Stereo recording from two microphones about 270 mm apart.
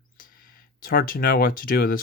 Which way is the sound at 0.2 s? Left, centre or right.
Left.